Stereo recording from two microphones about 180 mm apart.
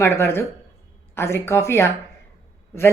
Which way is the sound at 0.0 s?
15° left (ahead or behind).